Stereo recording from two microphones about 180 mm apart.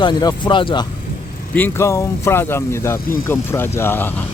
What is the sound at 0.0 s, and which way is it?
Speech, 25° left (ahead or behind).